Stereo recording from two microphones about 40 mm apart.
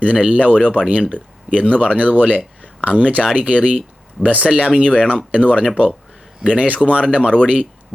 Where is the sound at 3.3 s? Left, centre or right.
Right.